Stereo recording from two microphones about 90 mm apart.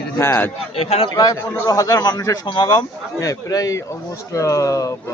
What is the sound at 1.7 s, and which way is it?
A man's voice, 45° left (ahead or behind).